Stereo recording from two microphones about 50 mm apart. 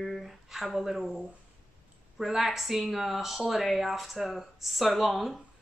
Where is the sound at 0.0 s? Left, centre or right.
Centre.